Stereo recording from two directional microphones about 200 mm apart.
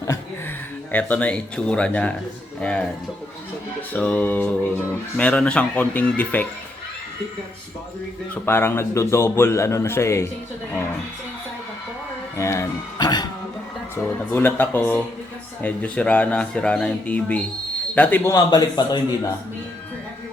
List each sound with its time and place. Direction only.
0.9 s speech: 10° left (ahead or behind)
8.4 s speech: 10° left (ahead or behind)
12.4 s speech: 15° left (ahead or behind)